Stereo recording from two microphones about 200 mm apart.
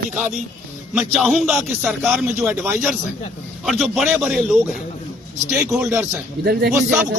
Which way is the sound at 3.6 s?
Centre (ahead or behind).